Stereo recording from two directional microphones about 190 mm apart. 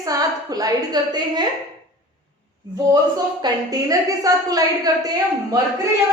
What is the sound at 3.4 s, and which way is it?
A woman's voice, 20° right (ahead or behind).